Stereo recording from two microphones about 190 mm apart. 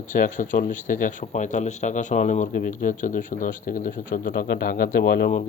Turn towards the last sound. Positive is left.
turn(degrees=50)  # may be behind; listen again after turning